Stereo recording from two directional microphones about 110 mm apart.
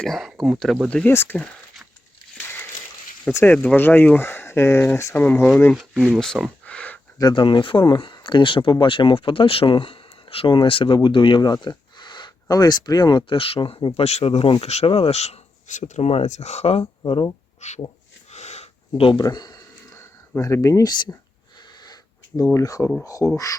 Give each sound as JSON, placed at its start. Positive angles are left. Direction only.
{"t": 0.0, "sound": "speech", "side_deg": 0}
{"t": 1.1, "sound": "speech", "side_deg": 20}
{"t": 3.3, "sound": "speech", "side_deg": 15}
{"t": 6.0, "sound": "a sound", "side_deg": 5}
{"t": 7.2, "sound": "speech", "side_deg": 45}
{"t": 14.8, "sound": "speech", "side_deg": 60}
{"t": 16.8, "sound": "speech", "side_deg": 45}
{"t": 17.6, "sound": "speech", "side_deg": 90}
{"t": 18.3, "sound": "a sound", "side_deg": 80}
{"t": 19.2, "sound": "speech", "side_deg": 40}
{"t": 20.9, "sound": "speech", "side_deg": 40}
{"t": 22.5, "sound": "speech", "side_deg": 30}
{"t": 23.2, "sound": "speech", "side_deg": 10}